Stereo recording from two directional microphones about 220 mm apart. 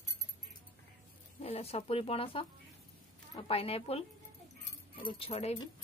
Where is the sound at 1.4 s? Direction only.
25° left (ahead or behind).